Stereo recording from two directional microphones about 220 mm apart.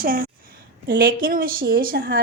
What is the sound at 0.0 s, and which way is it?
A woman's voice, 40° right (ahead or behind).